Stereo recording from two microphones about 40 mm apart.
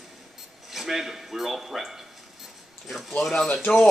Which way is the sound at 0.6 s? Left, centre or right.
Centre.